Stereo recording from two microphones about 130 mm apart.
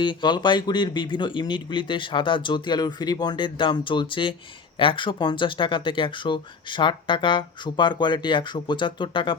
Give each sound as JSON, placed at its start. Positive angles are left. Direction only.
{"t": 0.0, "sound": "speech", "side_deg": 35}